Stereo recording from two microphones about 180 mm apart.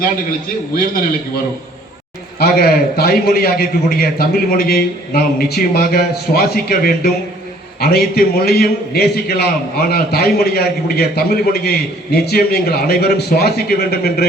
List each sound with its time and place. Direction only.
2.4 s a man's voice: 60° left (ahead or behind)